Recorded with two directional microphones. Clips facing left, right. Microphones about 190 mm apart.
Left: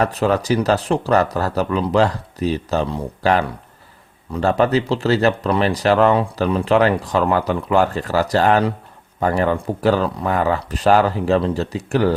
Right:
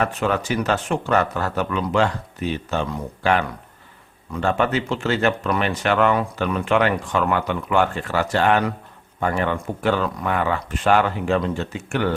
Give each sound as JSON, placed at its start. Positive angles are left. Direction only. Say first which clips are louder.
{"t": 0.0, "sound": "speech", "louder": "left 4 dB", "side_deg": 35}